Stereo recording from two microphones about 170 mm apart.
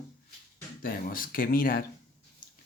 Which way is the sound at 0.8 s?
55° left (ahead or behind).